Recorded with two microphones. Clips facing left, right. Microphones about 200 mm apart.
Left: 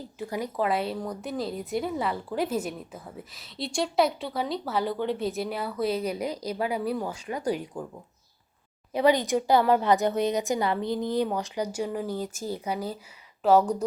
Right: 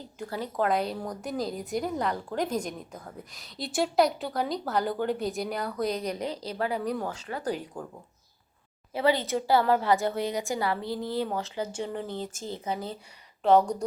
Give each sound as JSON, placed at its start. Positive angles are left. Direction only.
{"t": 0.3, "sound": "a woman's voice", "side_deg": 10}
{"t": 8.9, "sound": "a woman's voice", "side_deg": 15}